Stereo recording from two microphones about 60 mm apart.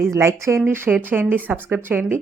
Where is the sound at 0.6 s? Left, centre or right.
Right.